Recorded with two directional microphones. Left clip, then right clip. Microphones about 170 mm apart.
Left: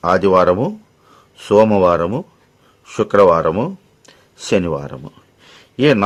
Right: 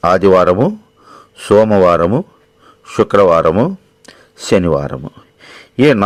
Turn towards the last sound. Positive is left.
turn(degrees=-30)  # may be behind; listen again after turning